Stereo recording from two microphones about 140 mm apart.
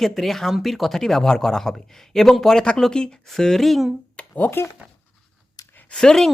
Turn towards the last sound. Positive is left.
turn(degrees=5)  # may be behind; listen again after turning